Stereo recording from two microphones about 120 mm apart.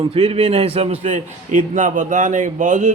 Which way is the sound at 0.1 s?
50° right (ahead or behind).